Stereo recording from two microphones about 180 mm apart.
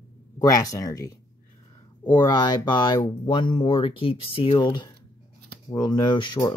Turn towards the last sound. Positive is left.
turn(degrees=25)  # may be behind; listen again after turning